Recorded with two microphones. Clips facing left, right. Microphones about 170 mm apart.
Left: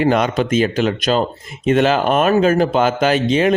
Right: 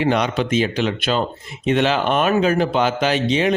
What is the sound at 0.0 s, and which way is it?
Speech, 45° left (ahead or behind).